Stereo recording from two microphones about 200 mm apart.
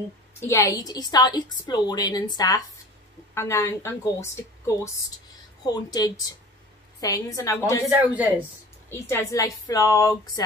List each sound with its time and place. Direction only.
0.4 s a woman's voice: 15° left (ahead or behind)
8.1 s speech: 5° right (ahead or behind)
8.9 s a woman's voice: 15° left (ahead or behind)